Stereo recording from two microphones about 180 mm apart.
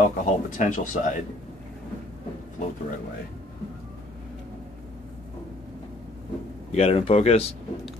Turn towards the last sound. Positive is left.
turn(degrees=35)  # may be behind; listen again after turning